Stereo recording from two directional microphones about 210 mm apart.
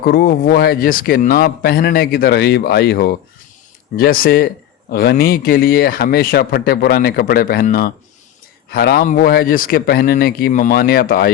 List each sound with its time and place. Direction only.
0.0 s speech: 45° left (ahead or behind)